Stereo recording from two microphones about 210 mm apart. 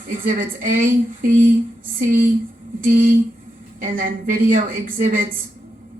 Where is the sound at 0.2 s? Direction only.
40° right (ahead or behind).